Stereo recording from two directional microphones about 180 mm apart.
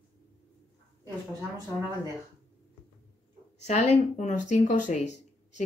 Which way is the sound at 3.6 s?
40° left (ahead or behind).